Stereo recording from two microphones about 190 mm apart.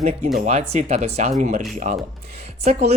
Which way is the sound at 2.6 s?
35° right (ahead or behind).